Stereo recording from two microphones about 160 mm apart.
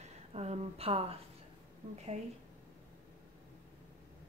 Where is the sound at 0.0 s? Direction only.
45° right (ahead or behind).